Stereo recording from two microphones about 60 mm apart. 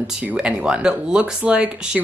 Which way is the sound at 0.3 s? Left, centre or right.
Centre.